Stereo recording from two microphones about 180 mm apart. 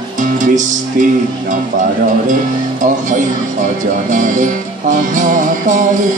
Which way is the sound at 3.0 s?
45° right (ahead or behind).